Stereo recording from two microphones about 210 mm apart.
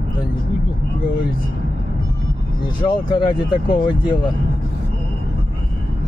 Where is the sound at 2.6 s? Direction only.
20° left (ahead or behind).